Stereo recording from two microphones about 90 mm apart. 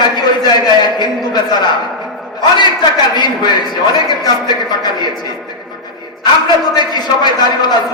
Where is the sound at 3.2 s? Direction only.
55° left (ahead or behind).